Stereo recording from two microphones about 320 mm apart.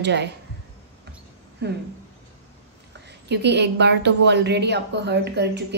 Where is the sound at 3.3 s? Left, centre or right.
Right.